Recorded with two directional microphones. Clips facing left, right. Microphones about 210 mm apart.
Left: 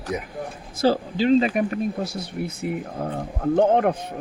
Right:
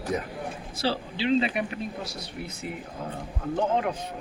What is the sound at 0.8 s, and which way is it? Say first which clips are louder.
Speech: left 9 dB; 45° left (ahead or behind).